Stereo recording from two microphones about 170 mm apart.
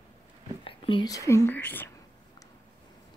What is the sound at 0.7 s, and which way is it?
Speech, 30° left (ahead or behind).